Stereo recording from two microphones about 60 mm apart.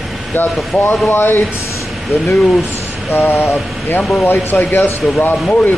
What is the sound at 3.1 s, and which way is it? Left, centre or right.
Speech, left.